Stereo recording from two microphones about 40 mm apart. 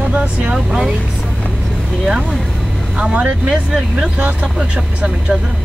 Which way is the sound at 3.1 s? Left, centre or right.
Right.